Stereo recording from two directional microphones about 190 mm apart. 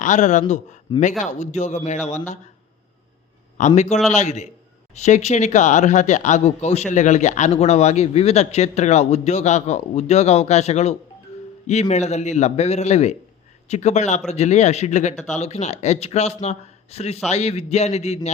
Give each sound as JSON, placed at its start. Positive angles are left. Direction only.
{"t": 0.0, "sound": "speech", "side_deg": 40}
{"t": 3.8, "sound": "speech", "side_deg": 35}